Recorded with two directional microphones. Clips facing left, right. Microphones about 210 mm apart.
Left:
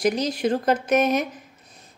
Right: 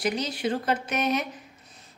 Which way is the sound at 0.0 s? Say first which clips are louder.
Left 5 dB; 40° left (ahead or behind).